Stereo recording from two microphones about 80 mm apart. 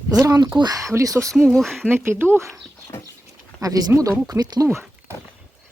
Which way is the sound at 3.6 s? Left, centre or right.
Right.